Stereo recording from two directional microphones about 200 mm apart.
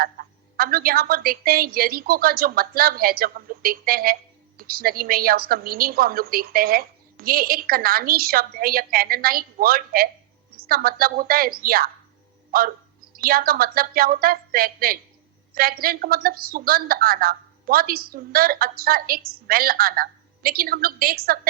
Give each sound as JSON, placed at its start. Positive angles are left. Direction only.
{"t": 0.0, "sound": "a woman's voice", "side_deg": -50}